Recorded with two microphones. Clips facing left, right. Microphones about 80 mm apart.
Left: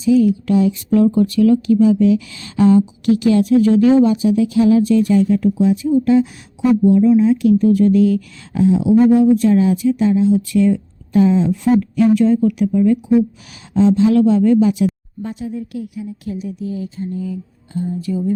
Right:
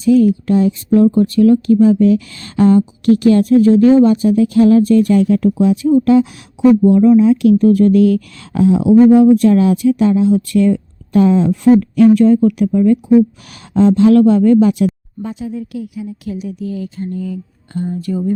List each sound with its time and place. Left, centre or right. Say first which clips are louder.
0.0 s speech: right 3 dB; right
0.4 s speech: right 2 dB; right
7.6 s speech: right 3 dB; right
16.2 s speech: right 1 dB; right